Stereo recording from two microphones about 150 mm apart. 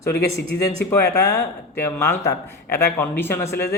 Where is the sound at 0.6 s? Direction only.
20° left (ahead or behind).